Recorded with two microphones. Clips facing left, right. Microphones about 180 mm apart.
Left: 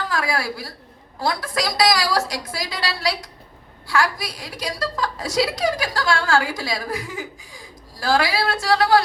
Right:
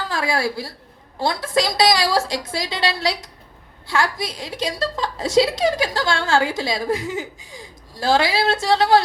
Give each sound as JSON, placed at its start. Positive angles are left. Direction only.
{"t": 0.1, "sound": "a woman's voice", "side_deg": -25}